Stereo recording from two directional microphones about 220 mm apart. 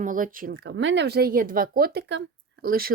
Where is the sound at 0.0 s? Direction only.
35° right (ahead or behind).